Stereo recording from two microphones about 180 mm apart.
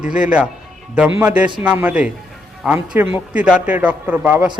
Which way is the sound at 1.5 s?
10° right (ahead or behind).